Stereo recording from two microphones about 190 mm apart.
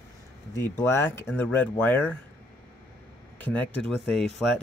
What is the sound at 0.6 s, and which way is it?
Speech, 10° left (ahead or behind).